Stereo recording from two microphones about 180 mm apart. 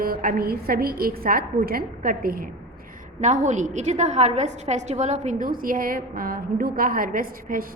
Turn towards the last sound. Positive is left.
turn(degrees=-50)  # may be behind; listen again after turning